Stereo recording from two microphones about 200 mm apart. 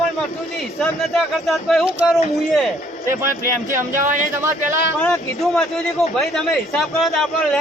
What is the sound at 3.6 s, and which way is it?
Speech, 40° right (ahead or behind).